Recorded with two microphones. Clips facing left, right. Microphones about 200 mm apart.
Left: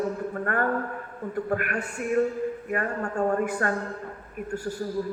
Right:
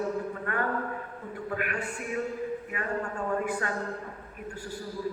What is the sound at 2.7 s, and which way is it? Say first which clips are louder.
Speech: left 7 dB; 45° left (ahead or behind).